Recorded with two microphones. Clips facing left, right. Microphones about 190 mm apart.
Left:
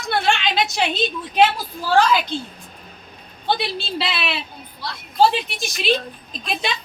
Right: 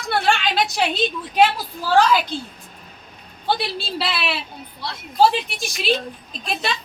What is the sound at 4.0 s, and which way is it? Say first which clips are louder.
Speech: right 1 dB; centre (ahead or behind).